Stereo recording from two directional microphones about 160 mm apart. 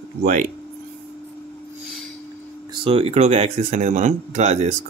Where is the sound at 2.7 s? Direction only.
35° right (ahead or behind).